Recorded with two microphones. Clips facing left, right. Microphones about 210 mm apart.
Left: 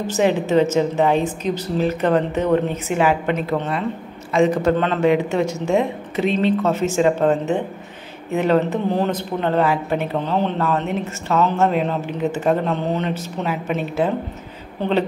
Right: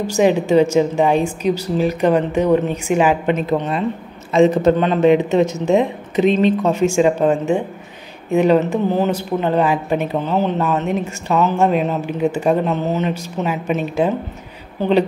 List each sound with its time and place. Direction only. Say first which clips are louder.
0.0 s a woman's voice: right 3 dB; 15° right (ahead or behind)
8.5 s a woman's voice: right 2 dB; 5° right (ahead or behind)